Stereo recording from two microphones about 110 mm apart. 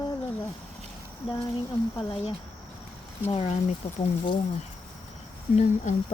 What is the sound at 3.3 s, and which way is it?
Speech, 65° left (ahead or behind).